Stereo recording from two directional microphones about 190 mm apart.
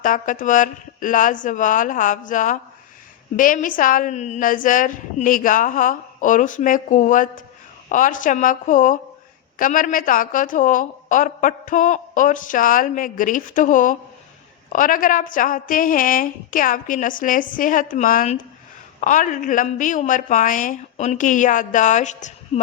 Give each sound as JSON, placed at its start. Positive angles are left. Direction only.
{"t": 0.0, "sound": "a woman's voice", "side_deg": 45}